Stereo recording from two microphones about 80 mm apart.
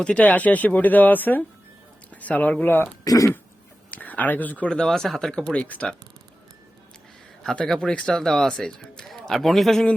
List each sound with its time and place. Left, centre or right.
0.0 s speech: centre
3.0 s speech: left
3.9 s speech: centre
7.4 s speech: centre